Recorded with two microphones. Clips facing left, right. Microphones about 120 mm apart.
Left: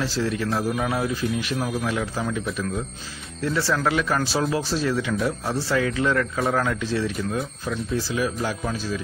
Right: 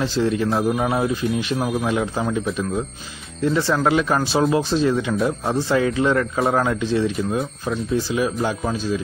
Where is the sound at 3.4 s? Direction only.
20° right (ahead or behind).